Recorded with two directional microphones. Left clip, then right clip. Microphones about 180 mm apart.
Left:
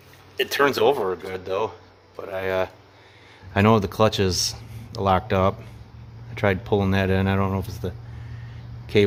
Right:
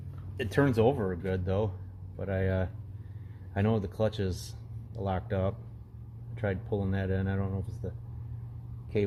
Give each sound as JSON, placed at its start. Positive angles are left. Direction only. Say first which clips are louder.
{"t": 0.3, "sound": "speech", "louder": "left 8 dB", "side_deg": 30}
{"t": 8.9, "sound": "speech", "louder": "left 12 dB", "side_deg": 35}